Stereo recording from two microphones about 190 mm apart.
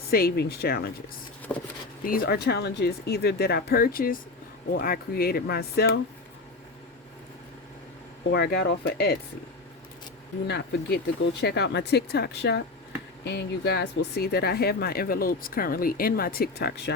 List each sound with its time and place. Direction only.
0.1 s speech: 55° left (ahead or behind)
1.5 s speech: 10° left (ahead or behind)
2.0 s speech: 50° left (ahead or behind)
8.3 s speech: 60° left (ahead or behind)
10.4 s speech: 60° left (ahead or behind)